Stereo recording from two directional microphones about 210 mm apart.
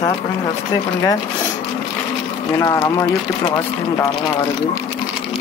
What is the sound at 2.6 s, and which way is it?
Speech, 15° left (ahead or behind).